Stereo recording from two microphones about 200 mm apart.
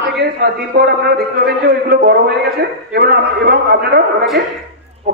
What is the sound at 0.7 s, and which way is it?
A man's voice, 55° right (ahead or behind).